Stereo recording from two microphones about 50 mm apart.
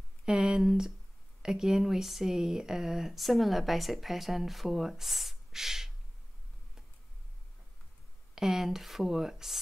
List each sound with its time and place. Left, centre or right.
0.2 s speech: centre
8.4 s speech: centre